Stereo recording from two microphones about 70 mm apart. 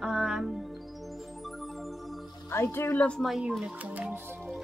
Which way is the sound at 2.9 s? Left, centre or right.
Centre.